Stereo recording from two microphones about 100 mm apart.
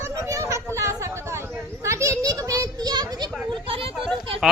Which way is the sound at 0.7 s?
30° right (ahead or behind).